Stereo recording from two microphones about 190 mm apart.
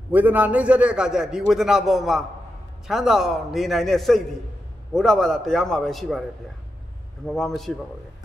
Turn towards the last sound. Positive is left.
turn(degrees=0)  # may be behind; listen again after turning